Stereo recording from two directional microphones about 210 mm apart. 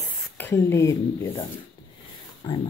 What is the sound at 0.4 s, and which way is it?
Speech, 10° left (ahead or behind).